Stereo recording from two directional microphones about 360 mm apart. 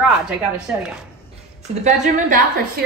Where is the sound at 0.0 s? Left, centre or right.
Centre.